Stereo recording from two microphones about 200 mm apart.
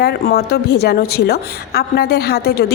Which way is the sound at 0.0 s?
50° left (ahead or behind).